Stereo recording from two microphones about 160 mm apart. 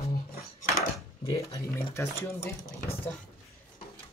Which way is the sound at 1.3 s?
20° left (ahead or behind).